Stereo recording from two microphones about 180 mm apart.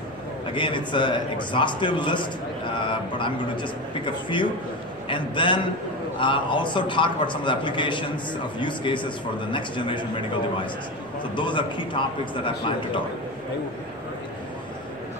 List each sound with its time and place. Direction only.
0.6 s speech: 25° left (ahead or behind)